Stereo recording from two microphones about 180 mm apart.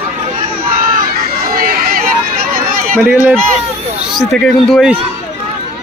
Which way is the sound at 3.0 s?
10° right (ahead or behind).